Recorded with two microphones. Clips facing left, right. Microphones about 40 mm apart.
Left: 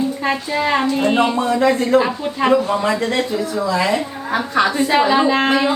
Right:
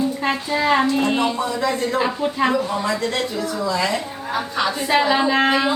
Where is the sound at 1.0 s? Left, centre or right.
Left.